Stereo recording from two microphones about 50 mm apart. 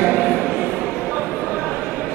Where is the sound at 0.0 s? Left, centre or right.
Centre.